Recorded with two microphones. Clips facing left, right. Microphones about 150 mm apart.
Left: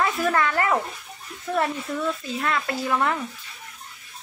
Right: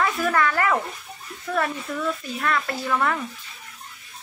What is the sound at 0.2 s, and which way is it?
Speech, 25° left (ahead or behind).